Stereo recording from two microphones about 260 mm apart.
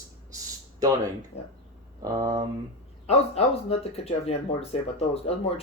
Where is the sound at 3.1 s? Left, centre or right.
Left.